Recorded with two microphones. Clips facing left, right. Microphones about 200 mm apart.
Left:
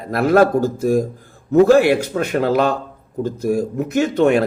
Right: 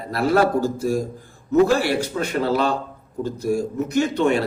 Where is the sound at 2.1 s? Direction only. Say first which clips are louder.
Left 4 dB; 50° left (ahead or behind).